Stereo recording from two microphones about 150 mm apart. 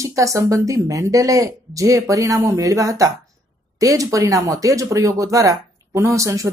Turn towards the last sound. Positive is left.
turn(degrees=-20)  # may be behind; listen again after turning